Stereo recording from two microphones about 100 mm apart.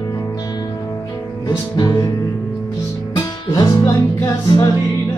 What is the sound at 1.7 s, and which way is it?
Music, 45° left (ahead or behind).